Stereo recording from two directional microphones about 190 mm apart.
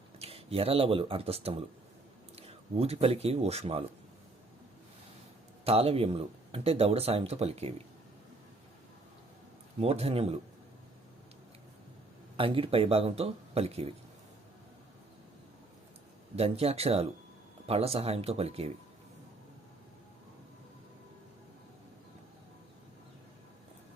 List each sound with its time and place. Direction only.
0.2 s speech: 30° right (ahead or behind)
5.6 s speech: 30° right (ahead or behind)
9.8 s speech: 30° right (ahead or behind)
12.4 s speech: 30° right (ahead or behind)
16.3 s speech: 30° right (ahead or behind)